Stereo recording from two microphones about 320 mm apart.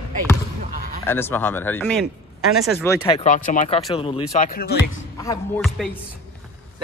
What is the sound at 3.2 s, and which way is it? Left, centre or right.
Speech, left.